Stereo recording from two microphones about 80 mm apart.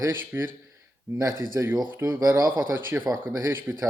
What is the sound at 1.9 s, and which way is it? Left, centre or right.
Speech, right.